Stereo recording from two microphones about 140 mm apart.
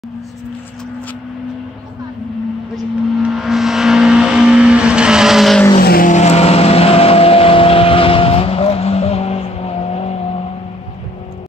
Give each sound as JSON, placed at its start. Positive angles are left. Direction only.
{"t": 3.2, "sound": "vehicle", "side_deg": 0}
{"t": 5.8, "sound": "vehicle", "side_deg": 80}